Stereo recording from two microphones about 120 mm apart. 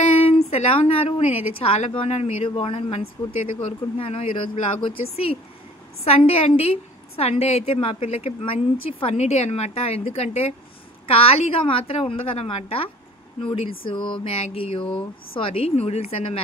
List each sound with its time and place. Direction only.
0.1 s a woman's voice: 55° left (ahead or behind)
4.0 s a woman's voice: 50° left (ahead or behind)